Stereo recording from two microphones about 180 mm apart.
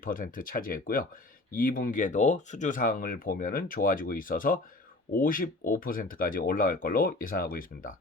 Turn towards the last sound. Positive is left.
turn(degrees=50)  # may be behind; listen again after turning